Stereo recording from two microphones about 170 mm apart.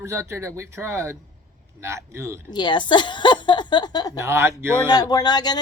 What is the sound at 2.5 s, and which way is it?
A woman's voice, 25° left (ahead or behind).